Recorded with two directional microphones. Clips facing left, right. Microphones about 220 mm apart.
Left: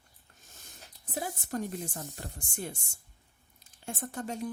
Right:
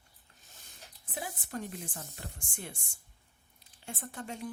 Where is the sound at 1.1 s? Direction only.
40° left (ahead or behind).